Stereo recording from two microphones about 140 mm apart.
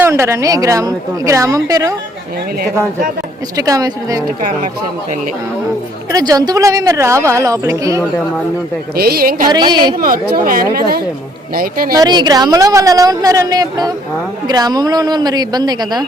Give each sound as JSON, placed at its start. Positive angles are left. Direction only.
{"t": 0.0, "sound": "a woman's voice", "side_deg": -20}
{"t": 3.6, "sound": "a woman's voice", "side_deg": -25}
{"t": 4.3, "sound": "speech", "side_deg": -65}
{"t": 6.1, "sound": "a woman's voice", "side_deg": -25}
{"t": 9.0, "sound": "speech", "side_deg": -90}
{"t": 9.5, "sound": "a woman's voice", "side_deg": -30}
{"t": 10.4, "sound": "speech", "side_deg": -90}
{"t": 11.9, "sound": "a woman's voice", "side_deg": -30}